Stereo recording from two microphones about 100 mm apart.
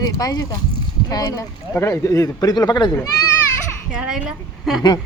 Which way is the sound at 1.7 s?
25° left (ahead or behind).